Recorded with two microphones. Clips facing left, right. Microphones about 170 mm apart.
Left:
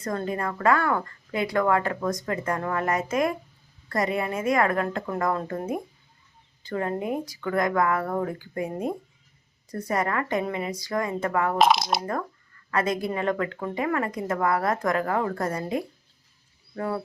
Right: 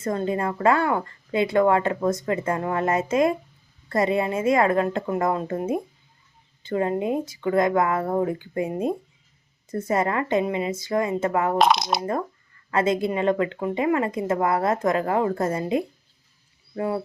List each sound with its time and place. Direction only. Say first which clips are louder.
0.0 s speech: right 4 dB; 25° right (ahead or behind)
11.5 s speech: left 1 dB; centre (ahead or behind)
11.9 s speech: right 3 dB; 20° right (ahead or behind)